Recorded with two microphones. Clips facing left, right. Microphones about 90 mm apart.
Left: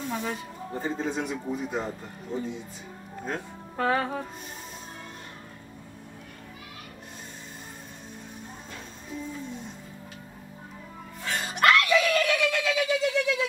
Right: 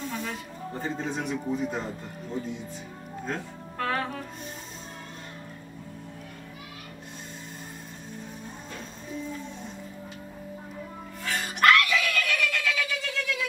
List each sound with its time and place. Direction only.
0.1 s speech: 10° left (ahead or behind)
3.3 s speech: 15° left (ahead or behind)
11.2 s a sound: 20° left (ahead or behind)